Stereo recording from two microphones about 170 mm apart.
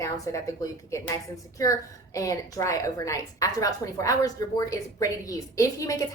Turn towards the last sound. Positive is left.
turn(degrees=20)  # may be behind; listen again after turning